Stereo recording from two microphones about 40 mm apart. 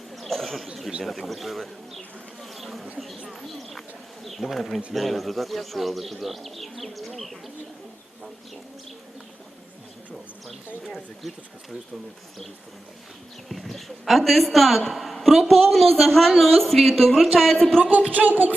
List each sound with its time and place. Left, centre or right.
0.2 s a sound: centre
1.0 s a man's voice: centre
2.4 s bee: centre
3.2 s a man's voice: centre
10.8 s speech: centre
13.5 s a man's voice: centre
18.1 s speech: right